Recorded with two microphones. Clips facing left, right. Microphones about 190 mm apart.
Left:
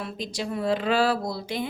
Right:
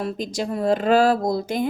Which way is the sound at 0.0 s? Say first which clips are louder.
Right 6 dB; 45° right (ahead or behind).